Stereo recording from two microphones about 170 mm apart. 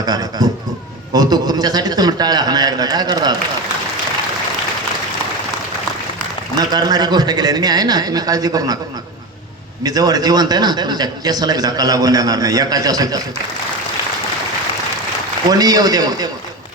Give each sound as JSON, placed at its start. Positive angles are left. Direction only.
{"t": 0.0, "sound": "speech", "side_deg": -25}
{"t": 6.6, "sound": "speech", "side_deg": -25}
{"t": 9.8, "sound": "speech", "side_deg": -20}
{"t": 15.4, "sound": "speech", "side_deg": -20}